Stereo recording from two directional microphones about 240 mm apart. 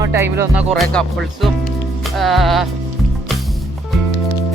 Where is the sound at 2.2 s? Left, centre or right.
Centre.